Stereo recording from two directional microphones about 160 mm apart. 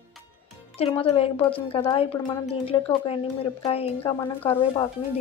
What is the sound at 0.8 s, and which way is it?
Speech, 35° left (ahead or behind).